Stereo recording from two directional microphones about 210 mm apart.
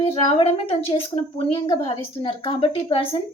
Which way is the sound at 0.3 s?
25° left (ahead or behind).